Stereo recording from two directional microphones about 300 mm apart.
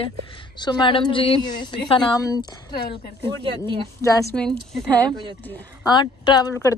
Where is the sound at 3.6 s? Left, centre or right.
Centre.